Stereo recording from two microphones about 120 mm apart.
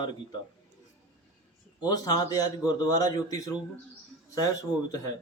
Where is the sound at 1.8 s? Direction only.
30° left (ahead or behind).